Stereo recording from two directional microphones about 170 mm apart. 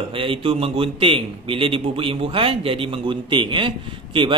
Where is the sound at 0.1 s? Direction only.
30° right (ahead or behind).